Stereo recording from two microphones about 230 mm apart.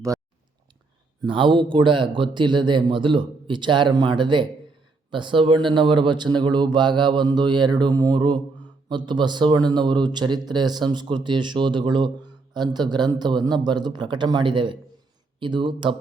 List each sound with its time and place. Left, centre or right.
1.2 s a man's voice: right